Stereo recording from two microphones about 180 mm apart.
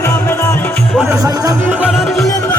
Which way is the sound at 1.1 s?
20° right (ahead or behind).